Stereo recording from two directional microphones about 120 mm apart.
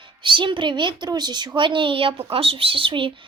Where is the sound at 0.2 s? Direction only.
45° right (ahead or behind).